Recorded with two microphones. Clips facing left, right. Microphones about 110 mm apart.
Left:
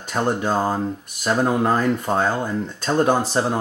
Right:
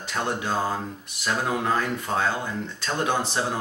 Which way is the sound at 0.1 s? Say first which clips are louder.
Left 6 dB; 45° left (ahead or behind).